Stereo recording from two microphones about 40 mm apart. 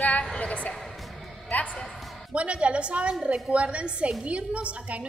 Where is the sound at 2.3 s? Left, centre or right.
Right.